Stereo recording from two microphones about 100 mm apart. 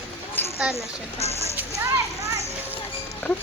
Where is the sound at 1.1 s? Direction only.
90° right.